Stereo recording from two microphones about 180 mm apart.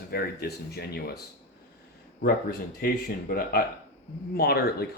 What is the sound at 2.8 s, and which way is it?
Speech, 55° left (ahead or behind).